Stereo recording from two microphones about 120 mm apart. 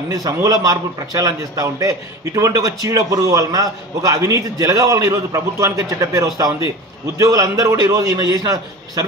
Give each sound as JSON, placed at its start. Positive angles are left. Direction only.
{"t": 0.1, "sound": "a man's voice", "side_deg": -30}